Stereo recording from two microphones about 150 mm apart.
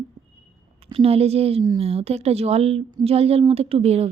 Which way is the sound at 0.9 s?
40° right (ahead or behind).